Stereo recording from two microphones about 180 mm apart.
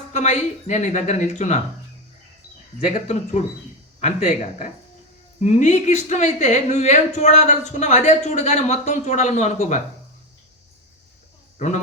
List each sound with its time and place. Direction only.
0.1 s speech: 40° left (ahead or behind)
2.8 s speech: 40° left (ahead or behind)
11.5 s a man's voice: 40° left (ahead or behind)